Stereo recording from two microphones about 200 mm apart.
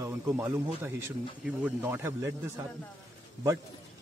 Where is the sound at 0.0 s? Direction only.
10° right (ahead or behind).